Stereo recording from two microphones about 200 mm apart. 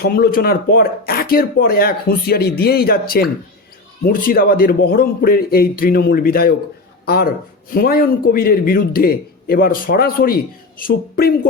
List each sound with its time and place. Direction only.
0.0 s speech: 50° left (ahead or behind)